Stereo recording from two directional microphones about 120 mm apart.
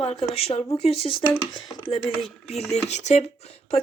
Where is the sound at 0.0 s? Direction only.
55° left (ahead or behind).